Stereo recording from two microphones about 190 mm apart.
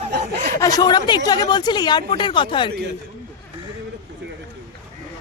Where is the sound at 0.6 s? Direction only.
20° left (ahead or behind).